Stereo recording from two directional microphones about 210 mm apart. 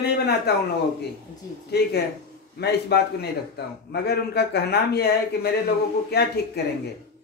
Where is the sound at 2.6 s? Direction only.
50° left (ahead or behind).